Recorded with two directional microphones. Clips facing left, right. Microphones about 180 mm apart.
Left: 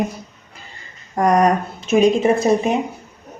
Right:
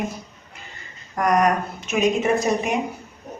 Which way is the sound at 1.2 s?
30° left (ahead or behind).